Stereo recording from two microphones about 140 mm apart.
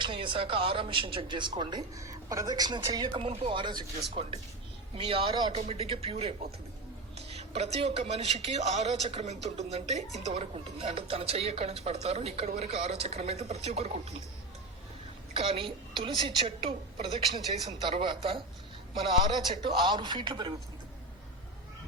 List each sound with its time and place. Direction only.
0.0 s speech: 35° right (ahead or behind)
3.2 s speech: 45° right (ahead or behind)
15.3 s speech: 40° right (ahead or behind)
19.5 s speech: 35° right (ahead or behind)